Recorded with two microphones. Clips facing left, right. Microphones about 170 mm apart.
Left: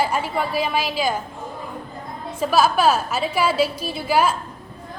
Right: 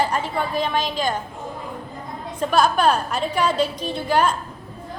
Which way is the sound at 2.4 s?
5° left (ahead or behind).